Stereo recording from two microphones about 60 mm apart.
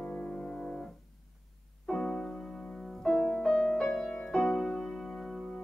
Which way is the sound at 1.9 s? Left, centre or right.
Centre.